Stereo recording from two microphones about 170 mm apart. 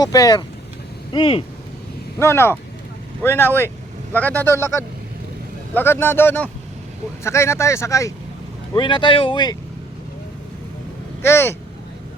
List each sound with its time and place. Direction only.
0.0 s speech: 20° left (ahead or behind)
2.1 s speech: 15° left (ahead or behind)
11.2 s speech: 15° left (ahead or behind)